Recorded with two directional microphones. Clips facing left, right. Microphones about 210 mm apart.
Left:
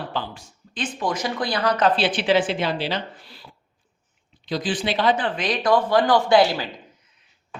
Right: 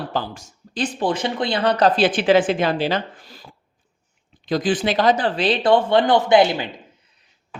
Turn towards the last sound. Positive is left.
turn(degrees=-20)  # may be behind; listen again after turning